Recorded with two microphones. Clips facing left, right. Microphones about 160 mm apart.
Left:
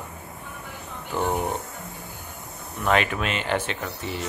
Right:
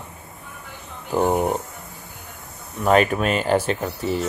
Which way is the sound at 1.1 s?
40° right (ahead or behind).